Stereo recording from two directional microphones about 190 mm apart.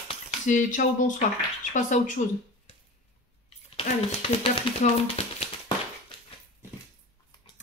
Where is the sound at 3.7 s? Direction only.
30° left (ahead or behind).